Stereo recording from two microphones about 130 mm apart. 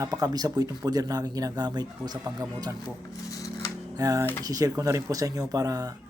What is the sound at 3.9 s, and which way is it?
Speech, 30° right (ahead or behind).